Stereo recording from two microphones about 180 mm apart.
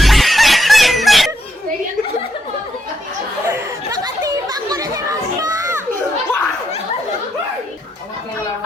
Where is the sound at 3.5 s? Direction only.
20° right (ahead or behind).